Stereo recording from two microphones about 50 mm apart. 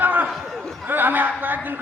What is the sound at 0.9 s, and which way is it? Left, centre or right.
Chuckle, right.